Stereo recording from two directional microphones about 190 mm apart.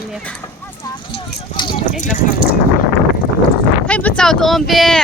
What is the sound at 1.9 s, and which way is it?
Speech, 40° left (ahead or behind).